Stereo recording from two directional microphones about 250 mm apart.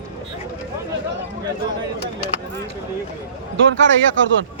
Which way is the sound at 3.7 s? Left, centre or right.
Right.